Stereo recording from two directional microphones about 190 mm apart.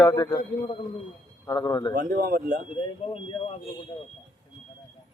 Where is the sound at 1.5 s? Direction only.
20° left (ahead or behind).